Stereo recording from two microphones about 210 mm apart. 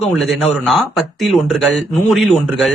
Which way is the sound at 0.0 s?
Centre (ahead or behind).